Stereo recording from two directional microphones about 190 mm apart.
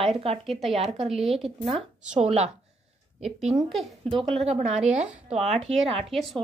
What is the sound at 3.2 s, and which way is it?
Speech, centre (ahead or behind).